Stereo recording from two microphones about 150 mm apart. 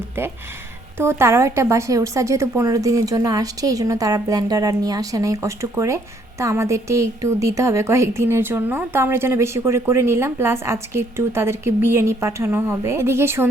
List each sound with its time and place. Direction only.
0.9 s a woman's voice: 15° right (ahead or behind)